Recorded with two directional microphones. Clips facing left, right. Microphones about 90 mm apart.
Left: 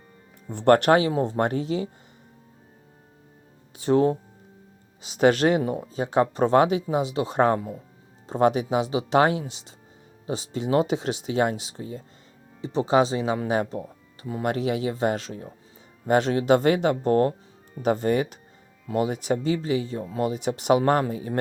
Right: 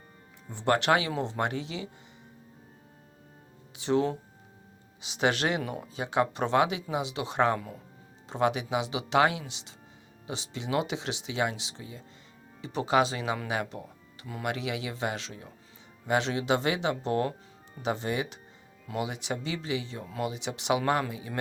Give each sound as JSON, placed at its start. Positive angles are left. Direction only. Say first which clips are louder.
{"t": 0.5, "sound": "speech", "louder": "left 7 dB", "side_deg": 50}
{"t": 3.7, "sound": "speech", "louder": "left 6 dB", "side_deg": 40}